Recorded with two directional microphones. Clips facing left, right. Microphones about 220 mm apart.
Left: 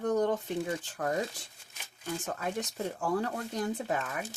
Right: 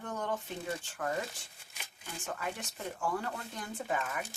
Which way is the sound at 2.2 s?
40° left (ahead or behind).